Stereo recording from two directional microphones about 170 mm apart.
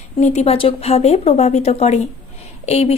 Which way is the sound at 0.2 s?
40° left (ahead or behind).